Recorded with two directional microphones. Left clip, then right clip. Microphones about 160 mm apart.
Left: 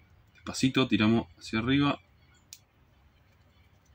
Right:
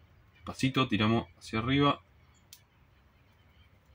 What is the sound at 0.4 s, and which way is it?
Speech, 20° right (ahead or behind).